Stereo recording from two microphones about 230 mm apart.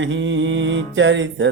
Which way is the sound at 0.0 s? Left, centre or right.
Right.